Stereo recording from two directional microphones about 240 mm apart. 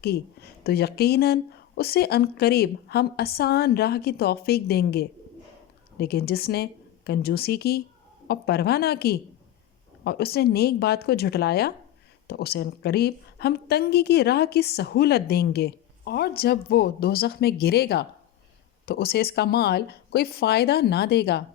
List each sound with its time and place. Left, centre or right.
0.6 s a woman's voice: left